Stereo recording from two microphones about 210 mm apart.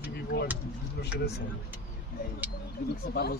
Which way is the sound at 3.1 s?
50° left (ahead or behind).